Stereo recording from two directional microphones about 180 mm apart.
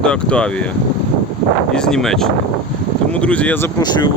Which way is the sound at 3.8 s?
25° left (ahead or behind).